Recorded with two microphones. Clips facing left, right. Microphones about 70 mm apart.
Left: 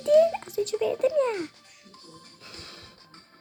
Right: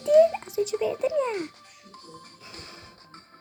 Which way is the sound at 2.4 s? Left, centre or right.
Right.